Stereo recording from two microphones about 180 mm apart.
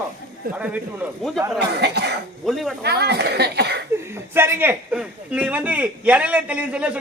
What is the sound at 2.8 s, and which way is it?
Speech, 65° right (ahead or behind).